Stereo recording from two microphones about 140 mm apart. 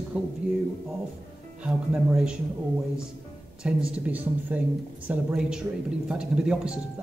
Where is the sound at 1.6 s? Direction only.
5° right (ahead or behind).